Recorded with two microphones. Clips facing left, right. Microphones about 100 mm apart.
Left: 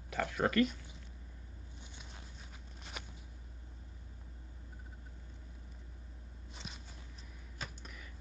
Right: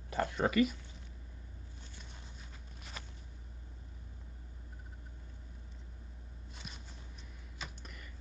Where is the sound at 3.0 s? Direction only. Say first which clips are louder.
Left 1 dB; 15° left (ahead or behind).